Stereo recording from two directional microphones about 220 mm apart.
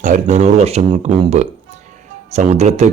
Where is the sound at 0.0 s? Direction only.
35° right (ahead or behind).